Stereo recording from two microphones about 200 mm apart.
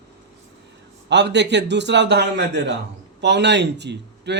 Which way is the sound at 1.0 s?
60° right (ahead or behind).